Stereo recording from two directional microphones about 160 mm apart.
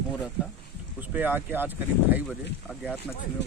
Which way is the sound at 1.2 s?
10° right (ahead or behind).